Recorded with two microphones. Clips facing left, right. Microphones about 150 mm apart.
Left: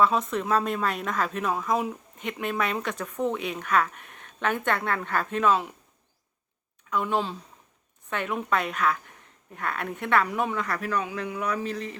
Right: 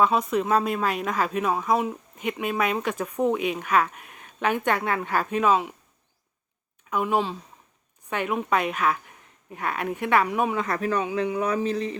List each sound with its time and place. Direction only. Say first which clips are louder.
0.0 s speech: right 2 dB; 10° right (ahead or behind)
6.9 s speech: right 2 dB; 10° right (ahead or behind)
10.6 s speech: right 3 dB; 20° right (ahead or behind)